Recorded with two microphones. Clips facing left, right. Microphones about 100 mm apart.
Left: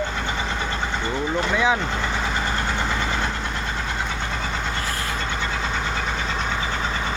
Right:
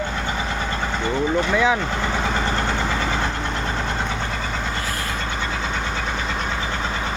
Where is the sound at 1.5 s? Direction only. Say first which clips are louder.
Right 1 dB; 15° left (ahead or behind).